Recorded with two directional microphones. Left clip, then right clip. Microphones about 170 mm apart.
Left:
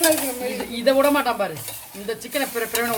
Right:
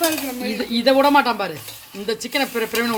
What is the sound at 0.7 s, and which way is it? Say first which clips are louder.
Speech: right 3 dB; 55° right (ahead or behind).